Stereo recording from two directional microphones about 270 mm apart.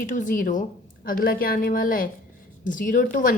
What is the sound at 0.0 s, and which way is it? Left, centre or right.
A woman's voice, left.